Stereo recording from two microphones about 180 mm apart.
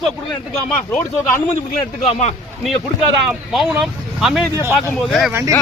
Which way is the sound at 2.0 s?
40° left (ahead or behind).